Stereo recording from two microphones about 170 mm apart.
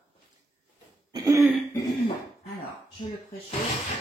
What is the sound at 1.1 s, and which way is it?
Throat clearing, 20° right (ahead or behind).